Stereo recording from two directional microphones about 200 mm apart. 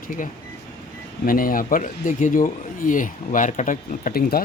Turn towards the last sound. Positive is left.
turn(degrees=50)  # may be behind; listen again after turning